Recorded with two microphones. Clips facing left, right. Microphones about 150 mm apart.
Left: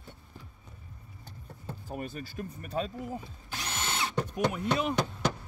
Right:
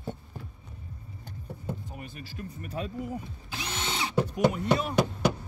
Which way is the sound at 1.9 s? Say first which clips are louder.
Left 5 dB; 40° left (ahead or behind).